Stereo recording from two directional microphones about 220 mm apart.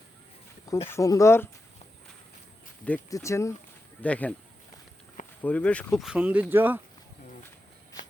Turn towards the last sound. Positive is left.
turn(degrees=-10)  # may be behind; listen again after turning